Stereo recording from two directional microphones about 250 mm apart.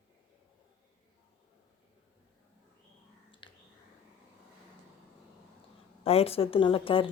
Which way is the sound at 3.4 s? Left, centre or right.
Centre.